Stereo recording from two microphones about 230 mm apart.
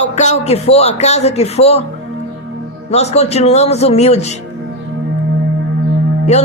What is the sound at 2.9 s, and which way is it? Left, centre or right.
Speech, left.